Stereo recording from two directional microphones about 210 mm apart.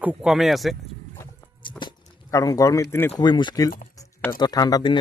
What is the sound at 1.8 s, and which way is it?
Speech, 20° left (ahead or behind).